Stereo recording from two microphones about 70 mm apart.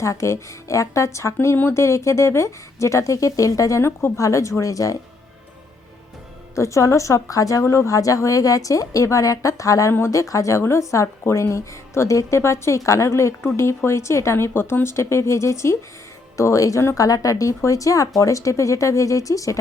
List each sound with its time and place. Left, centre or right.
0.0 s a woman's voice: left
6.6 s a woman's voice: left
7.6 s a woman's voice: left